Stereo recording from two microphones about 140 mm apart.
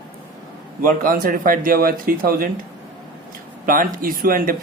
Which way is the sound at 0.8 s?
90° right.